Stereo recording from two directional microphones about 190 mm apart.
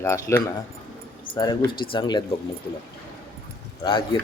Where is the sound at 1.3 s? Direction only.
25° left (ahead or behind).